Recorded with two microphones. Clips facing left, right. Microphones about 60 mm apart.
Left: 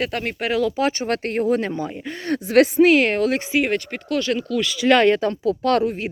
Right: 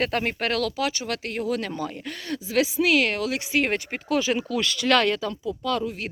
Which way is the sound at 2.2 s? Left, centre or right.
Left.